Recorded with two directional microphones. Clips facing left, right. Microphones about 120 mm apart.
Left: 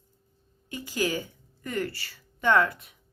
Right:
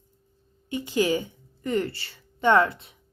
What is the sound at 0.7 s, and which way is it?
A woman's voice, 25° right (ahead or behind).